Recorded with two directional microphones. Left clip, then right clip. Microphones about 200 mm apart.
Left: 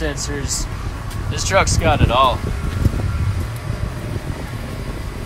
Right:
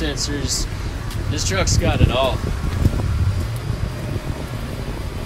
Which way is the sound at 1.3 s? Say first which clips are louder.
Left 5 dB; 20° left (ahead or behind).